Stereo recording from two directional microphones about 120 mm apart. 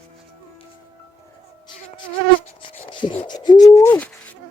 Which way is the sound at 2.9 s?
45° left (ahead or behind).